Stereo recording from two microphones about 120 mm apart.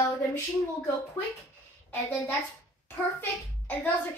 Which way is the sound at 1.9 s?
15° left (ahead or behind).